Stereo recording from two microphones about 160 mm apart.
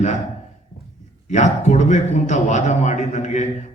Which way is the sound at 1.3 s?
45° left (ahead or behind).